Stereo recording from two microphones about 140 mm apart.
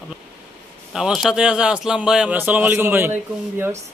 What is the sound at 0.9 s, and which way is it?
A man's voice, 5° right (ahead or behind).